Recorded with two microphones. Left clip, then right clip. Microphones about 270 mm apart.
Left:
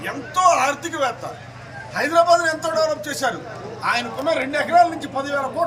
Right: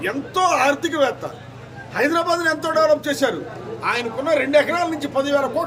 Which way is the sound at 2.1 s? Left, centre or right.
Centre.